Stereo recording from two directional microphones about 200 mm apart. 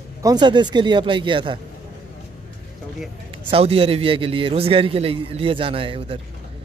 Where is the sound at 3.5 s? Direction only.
30° right (ahead or behind).